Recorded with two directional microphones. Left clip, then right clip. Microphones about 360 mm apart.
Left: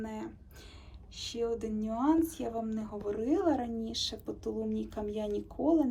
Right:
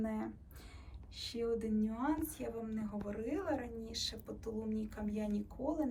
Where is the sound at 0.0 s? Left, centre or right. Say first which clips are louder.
Even; centre.